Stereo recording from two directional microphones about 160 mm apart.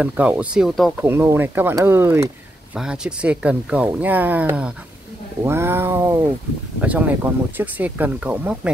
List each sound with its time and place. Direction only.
0.0 s speech: 10° right (ahead or behind)
1.0 s speech: 15° right (ahead or behind)
2.8 s speech: 5° right (ahead or behind)